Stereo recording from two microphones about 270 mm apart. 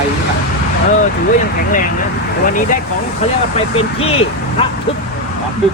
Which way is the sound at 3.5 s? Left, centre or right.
Left.